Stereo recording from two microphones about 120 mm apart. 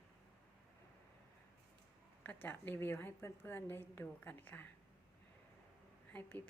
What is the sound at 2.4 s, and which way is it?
A woman's voice, 15° left (ahead or behind).